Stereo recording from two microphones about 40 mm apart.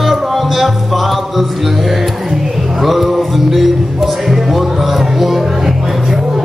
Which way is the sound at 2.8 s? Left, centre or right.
Centre.